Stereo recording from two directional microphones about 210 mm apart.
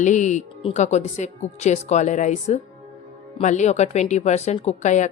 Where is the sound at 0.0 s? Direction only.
35° left (ahead or behind).